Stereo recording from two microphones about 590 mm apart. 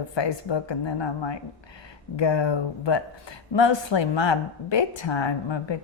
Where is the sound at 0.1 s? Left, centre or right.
Left.